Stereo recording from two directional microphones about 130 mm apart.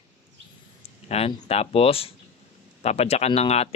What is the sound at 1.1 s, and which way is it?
Speech, 50° left (ahead or behind).